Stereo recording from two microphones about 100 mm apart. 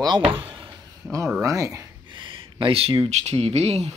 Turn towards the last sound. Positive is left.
turn(degrees=-90)